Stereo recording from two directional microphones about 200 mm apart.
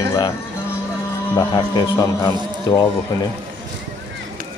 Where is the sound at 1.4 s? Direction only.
15° left (ahead or behind).